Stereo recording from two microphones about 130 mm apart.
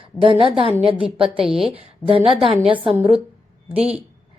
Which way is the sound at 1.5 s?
45° right (ahead or behind).